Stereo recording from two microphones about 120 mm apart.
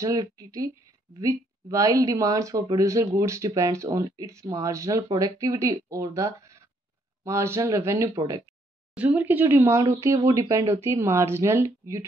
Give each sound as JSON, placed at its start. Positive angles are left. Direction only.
{"t": 0.0, "sound": "speech", "side_deg": -30}
{"t": 8.9, "sound": "speech", "side_deg": -15}